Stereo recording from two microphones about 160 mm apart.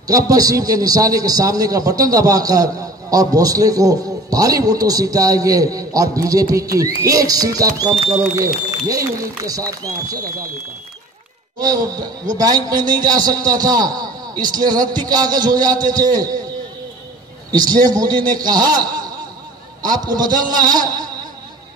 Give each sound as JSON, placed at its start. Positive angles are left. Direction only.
{"t": 0.0, "sound": "a man's voice", "side_deg": -20}
{"t": 11.6, "sound": "a man's voice", "side_deg": -25}
{"t": 17.5, "sound": "a man's voice", "side_deg": -25}
{"t": 19.8, "sound": "a man's voice", "side_deg": -25}